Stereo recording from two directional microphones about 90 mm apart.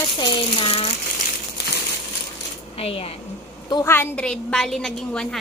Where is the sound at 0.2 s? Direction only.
75° left (ahead or behind).